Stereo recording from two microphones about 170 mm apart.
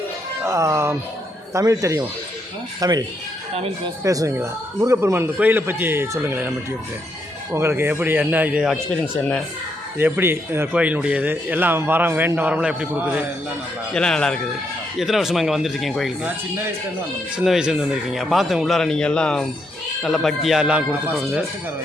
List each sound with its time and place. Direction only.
0.4 s a man's voice: 15° right (ahead or behind)
3.5 s speech: 35° right (ahead or behind)
4.0 s a man's voice: 20° right (ahead or behind)
7.5 s a man's voice: 15° right (ahead or behind)
13.9 s speech: 5° left (ahead or behind)
17.3 s speech: 5° right (ahead or behind)